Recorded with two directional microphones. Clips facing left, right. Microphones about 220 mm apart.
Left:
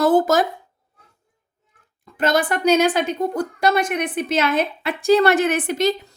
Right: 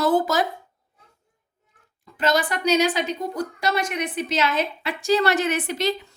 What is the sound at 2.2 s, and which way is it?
A woman's voice, 55° left (ahead or behind).